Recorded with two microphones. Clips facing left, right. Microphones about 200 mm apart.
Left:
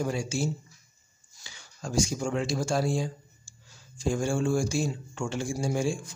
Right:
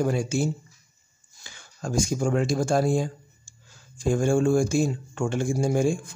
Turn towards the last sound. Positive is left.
turn(degrees=-55)  # may be behind; listen again after turning